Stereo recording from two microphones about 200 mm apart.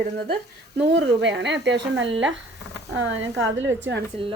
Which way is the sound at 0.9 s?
60° right (ahead or behind).